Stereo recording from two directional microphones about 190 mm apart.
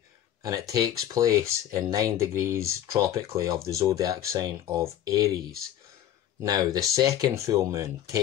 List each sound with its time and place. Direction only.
0.4 s speech: 20° right (ahead or behind)
6.4 s speech: 20° right (ahead or behind)